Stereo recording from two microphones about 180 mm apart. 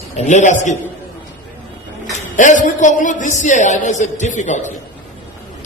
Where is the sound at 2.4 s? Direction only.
45° left (ahead or behind).